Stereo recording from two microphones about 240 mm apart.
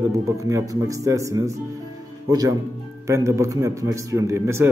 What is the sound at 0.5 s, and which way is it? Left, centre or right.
A man's voice, centre.